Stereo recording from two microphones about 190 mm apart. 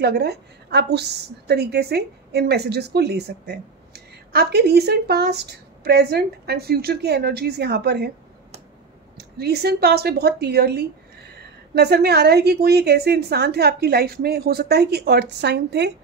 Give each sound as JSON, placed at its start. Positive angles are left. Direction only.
{"t": 0.0, "sound": "a woman's voice", "side_deg": -60}
{"t": 9.4, "sound": "a woman's voice", "side_deg": -60}